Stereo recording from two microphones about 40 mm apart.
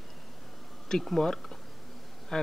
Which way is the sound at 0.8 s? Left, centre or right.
Centre.